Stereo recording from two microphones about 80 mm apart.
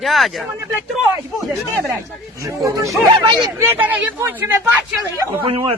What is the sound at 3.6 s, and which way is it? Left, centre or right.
Speech, right.